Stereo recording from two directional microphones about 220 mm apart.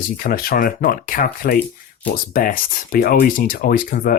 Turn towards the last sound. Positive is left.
turn(degrees=40)  # may be behind; listen again after turning